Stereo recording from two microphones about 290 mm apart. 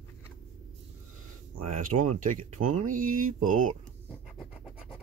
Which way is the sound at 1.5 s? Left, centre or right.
Right.